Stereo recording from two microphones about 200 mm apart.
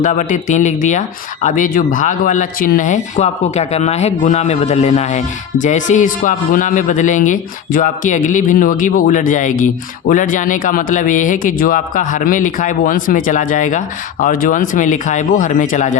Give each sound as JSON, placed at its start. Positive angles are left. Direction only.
{"t": 0.0, "sound": "speech", "side_deg": 40}